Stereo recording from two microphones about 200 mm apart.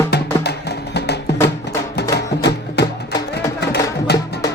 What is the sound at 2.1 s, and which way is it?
Music, 55° left (ahead or behind).